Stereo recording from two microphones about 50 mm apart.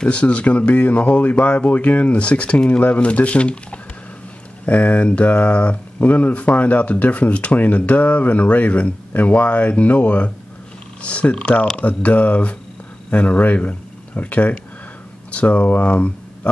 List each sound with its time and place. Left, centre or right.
0.0 s speech: left